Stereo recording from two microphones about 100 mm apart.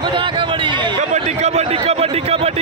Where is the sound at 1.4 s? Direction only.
90° right.